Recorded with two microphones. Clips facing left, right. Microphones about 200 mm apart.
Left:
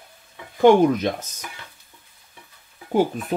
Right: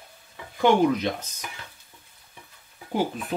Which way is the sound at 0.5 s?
45° left (ahead or behind).